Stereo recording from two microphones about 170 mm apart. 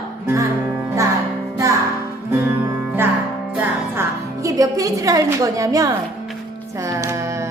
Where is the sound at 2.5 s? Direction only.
10° right (ahead or behind).